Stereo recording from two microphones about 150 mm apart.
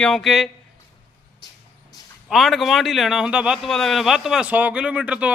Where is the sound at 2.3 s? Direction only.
Centre (ahead or behind).